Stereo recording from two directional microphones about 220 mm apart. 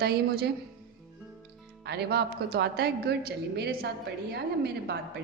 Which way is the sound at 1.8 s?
45° right (ahead or behind).